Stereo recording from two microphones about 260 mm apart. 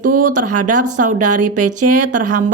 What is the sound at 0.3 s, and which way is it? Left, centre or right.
Speech, right.